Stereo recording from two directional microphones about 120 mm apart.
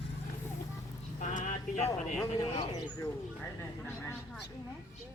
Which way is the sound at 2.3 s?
60° left (ahead or behind).